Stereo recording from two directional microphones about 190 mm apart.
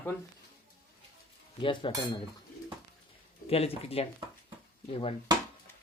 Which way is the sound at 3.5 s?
30° left (ahead or behind).